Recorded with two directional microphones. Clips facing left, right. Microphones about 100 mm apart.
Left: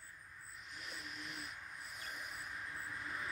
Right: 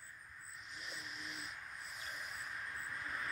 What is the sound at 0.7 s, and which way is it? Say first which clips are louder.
Vehicle: even; 50° left (ahead or behind).